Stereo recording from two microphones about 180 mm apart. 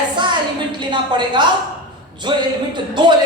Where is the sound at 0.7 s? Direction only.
25° right (ahead or behind).